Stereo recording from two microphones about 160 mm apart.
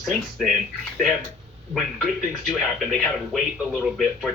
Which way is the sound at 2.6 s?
Centre (ahead or behind).